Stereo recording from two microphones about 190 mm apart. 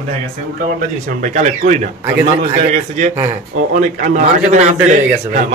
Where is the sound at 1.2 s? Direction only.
40° right (ahead or behind).